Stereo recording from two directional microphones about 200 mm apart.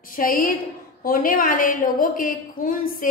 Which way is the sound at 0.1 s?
45° left (ahead or behind).